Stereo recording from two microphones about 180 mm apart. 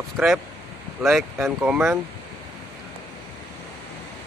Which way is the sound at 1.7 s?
15° right (ahead or behind).